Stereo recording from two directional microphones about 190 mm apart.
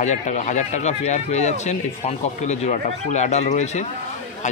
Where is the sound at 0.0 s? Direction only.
40° left (ahead or behind).